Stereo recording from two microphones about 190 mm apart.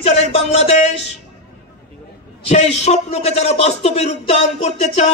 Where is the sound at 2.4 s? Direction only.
35° left (ahead or behind).